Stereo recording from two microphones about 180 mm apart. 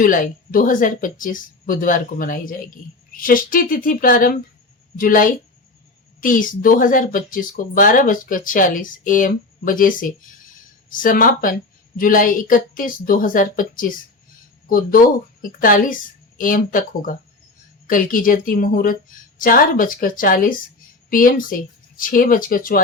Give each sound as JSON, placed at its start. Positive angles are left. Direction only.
{"t": 0.0, "sound": "speech", "side_deg": 50}